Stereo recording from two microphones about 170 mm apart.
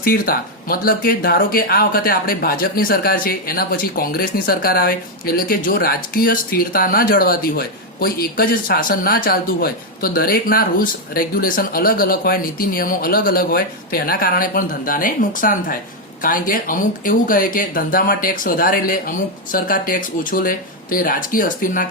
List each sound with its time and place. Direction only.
0.0 s speech: 55° left (ahead or behind)